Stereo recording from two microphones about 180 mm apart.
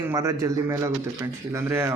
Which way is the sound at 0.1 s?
20° right (ahead or behind).